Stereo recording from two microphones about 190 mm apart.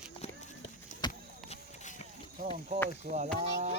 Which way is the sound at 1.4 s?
40° left (ahead or behind).